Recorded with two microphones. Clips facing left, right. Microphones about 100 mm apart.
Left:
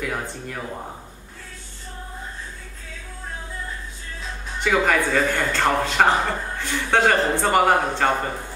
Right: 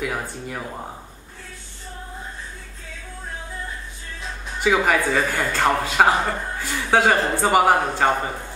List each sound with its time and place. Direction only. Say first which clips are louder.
0.0 s speech: right 1 dB; 5° right (ahead or behind)
4.6 s a man's voice: right 1 dB; 5° right (ahead or behind)